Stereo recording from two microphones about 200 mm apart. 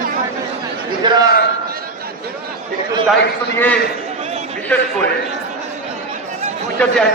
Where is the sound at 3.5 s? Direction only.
10° left (ahead or behind).